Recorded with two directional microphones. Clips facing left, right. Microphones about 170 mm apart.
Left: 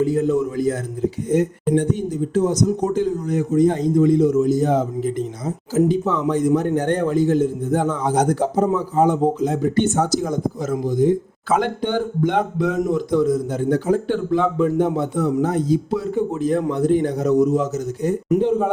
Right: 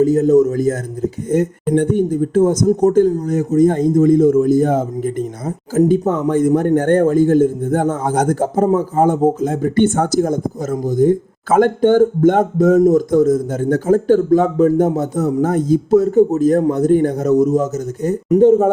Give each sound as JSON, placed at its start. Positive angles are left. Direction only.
{"t": 0.0, "sound": "a man's voice", "side_deg": -40}